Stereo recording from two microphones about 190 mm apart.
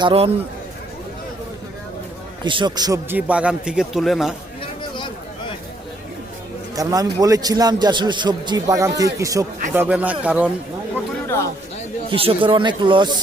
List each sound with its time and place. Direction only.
0.0 s a man's voice: 30° right (ahead or behind)
2.4 s a man's voice: 25° right (ahead or behind); by 4.4 s centre (ahead or behind)
4.6 s a sound: 25° left (ahead or behind)
6.7 s a man's voice: 20° right (ahead or behind)
12.1 s a man's voice: 30° right (ahead or behind)